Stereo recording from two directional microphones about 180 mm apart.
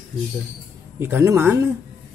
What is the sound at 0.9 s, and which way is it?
Speech, 15° right (ahead or behind).